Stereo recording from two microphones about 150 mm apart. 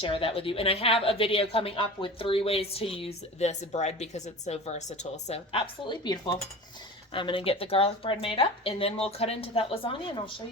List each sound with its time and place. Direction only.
0.0 s a woman's voice: 40° left (ahead or behind)